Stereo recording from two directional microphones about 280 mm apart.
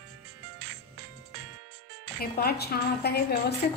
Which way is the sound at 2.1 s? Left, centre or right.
Left.